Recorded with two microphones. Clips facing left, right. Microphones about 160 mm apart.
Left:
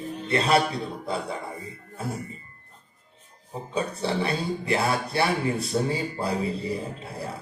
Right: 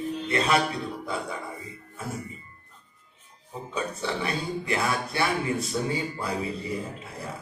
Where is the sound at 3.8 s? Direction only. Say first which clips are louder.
Left 4 dB; 30° left (ahead or behind).